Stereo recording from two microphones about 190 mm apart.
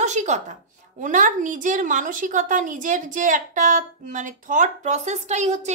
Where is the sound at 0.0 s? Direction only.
40° right (ahead or behind).